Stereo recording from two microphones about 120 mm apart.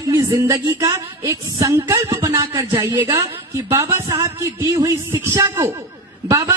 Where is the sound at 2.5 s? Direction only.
20° right (ahead or behind).